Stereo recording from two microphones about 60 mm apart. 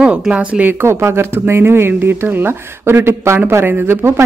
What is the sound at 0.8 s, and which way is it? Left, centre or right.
Speech, right.